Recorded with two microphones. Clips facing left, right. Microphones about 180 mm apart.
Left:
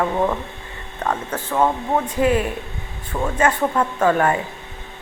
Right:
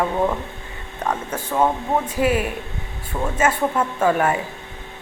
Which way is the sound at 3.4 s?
5° right (ahead or behind).